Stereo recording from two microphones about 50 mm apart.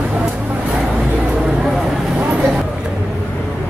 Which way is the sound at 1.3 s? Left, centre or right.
Centre.